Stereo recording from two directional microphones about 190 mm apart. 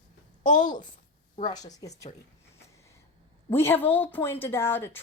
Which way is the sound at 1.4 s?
20° left (ahead or behind).